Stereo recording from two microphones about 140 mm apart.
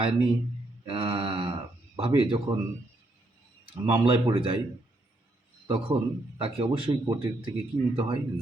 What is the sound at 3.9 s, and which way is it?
Speech, 40° right (ahead or behind).